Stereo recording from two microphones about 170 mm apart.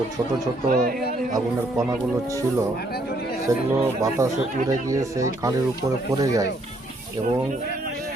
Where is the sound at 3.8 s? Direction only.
15° right (ahead or behind).